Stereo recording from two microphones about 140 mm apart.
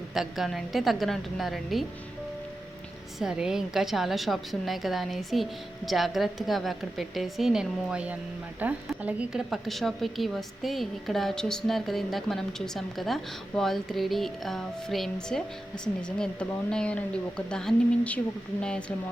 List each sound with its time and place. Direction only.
0.1 s a woman's voice: centre (ahead or behind)
3.2 s a woman's voice: 5° right (ahead or behind)